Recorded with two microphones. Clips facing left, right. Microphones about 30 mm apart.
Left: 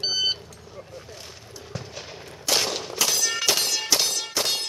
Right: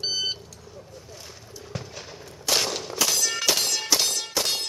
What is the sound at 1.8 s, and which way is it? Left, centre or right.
Gunshot, centre.